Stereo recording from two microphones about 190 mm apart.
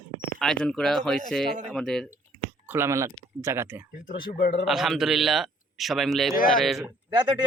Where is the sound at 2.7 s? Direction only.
15° right (ahead or behind).